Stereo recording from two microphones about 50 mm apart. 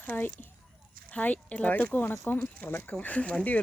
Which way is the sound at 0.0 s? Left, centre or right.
Left.